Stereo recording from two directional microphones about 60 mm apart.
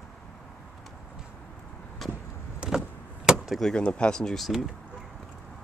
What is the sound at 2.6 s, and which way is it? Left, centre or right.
Vehicle, centre.